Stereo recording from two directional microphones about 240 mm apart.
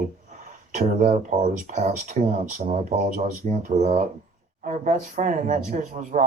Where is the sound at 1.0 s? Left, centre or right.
Right.